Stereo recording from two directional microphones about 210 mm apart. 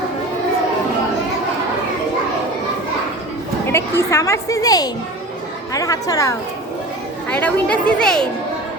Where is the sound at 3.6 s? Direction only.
10° left (ahead or behind).